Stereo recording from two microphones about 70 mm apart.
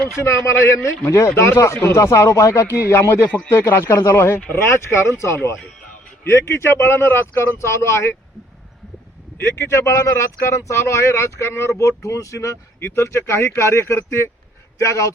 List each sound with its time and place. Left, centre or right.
0.3 s speech: left
9.4 s speech: left